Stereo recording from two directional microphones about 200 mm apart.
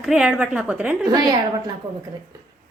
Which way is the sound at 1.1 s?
20° right (ahead or behind).